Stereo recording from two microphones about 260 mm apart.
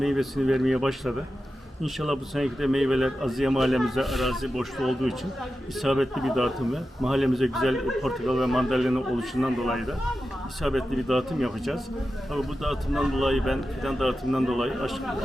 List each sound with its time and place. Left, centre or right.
0.0 s speech: centre